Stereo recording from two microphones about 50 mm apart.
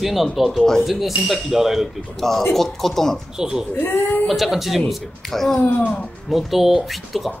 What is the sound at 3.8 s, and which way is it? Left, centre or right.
Speech, left.